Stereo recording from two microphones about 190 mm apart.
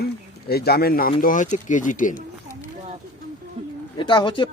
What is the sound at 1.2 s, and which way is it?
Speech, 45° left (ahead or behind).